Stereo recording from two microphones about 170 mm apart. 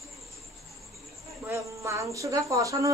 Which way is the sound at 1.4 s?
15° right (ahead or behind).